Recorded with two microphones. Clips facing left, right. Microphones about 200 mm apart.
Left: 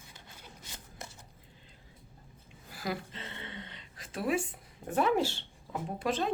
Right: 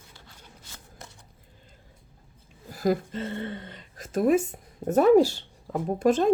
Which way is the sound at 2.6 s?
45° right (ahead or behind).